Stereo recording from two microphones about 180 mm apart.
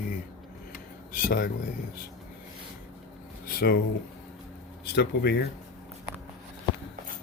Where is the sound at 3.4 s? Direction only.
60° left (ahead or behind).